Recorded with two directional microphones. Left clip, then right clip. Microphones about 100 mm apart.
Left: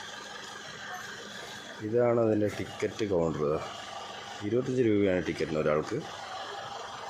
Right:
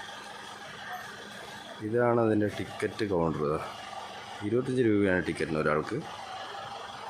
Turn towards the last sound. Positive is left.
turn(degrees=-15)  # may be behind; listen again after turning